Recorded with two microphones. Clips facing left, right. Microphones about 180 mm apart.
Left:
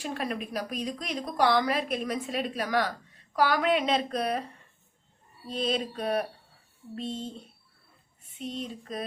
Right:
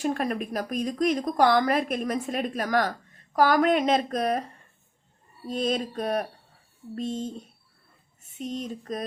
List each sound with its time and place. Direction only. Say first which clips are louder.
0.0 s a woman's voice: right 6 dB; 45° right (ahead or behind)